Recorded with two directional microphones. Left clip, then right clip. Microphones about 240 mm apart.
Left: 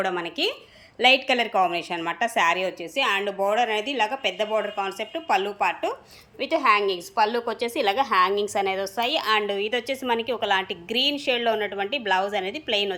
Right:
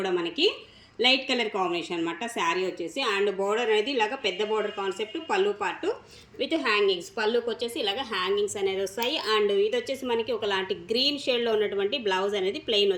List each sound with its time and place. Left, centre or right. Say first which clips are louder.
0.0 s a woman's voice: even; centre
8.5 s a woman's voice: left 3 dB; left
9.0 s a woman's voice: left 3 dB; centre